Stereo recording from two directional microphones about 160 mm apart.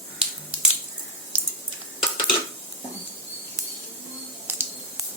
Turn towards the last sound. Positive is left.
turn(degrees=-15)  # may be behind; listen again after turning